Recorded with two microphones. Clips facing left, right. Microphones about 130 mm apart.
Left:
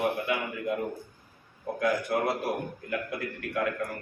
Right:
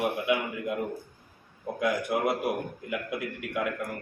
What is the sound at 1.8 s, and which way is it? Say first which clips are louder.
A man's voice: even; 15° right (ahead or behind).